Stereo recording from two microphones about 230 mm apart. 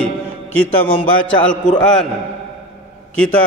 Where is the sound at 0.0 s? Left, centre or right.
Centre.